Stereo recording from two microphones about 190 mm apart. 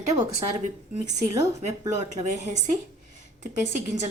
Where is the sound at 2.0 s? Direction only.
40° right (ahead or behind).